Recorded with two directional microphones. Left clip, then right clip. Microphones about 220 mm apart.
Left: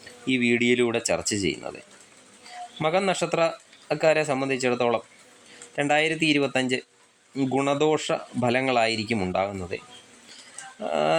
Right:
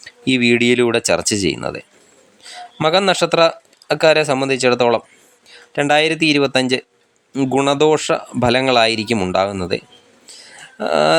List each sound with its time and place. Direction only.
0.0 s speech: 25° right (ahead or behind)